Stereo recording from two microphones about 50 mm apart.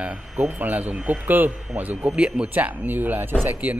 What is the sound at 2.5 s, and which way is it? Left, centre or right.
Speech, right.